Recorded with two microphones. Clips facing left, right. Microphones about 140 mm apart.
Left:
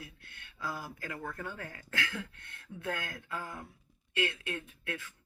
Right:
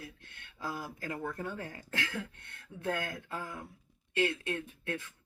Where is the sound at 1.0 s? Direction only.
30° right (ahead or behind).